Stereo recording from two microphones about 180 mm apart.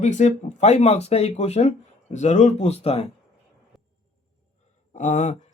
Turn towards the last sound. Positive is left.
turn(degrees=40)  # may be behind; listen again after turning